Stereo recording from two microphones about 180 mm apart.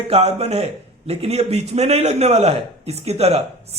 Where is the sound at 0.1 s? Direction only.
35° right (ahead or behind).